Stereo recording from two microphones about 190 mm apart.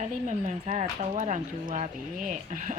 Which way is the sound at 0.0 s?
40° right (ahead or behind).